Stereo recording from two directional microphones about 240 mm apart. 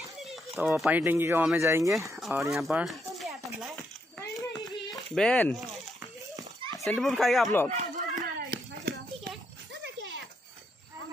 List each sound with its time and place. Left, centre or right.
0.6 s speech: centre
2.1 s speech: centre
2.5 s a sound: centre
5.1 s a child's voice: centre
6.3 s children playing: centre
6.8 s a child's voice: centre
7.7 s a sound: right